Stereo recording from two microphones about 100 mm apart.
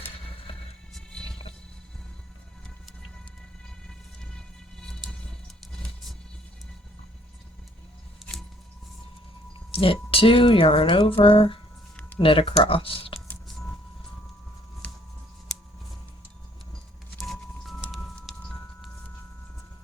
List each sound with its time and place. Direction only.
0.9 s music: 5° left (ahead or behind)
3.8 s music: 5° left (ahead or behind)
9.7 s speech: 65° left (ahead or behind)
11.9 s a sound: 20° left (ahead or behind)
12.2 s speech: 60° left (ahead or behind)
14.8 s a sound: 15° left (ahead or behind)
17.2 s music: centre (ahead or behind)